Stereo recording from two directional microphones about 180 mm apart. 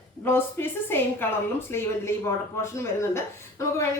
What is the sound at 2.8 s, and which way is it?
Speech, 15° left (ahead or behind).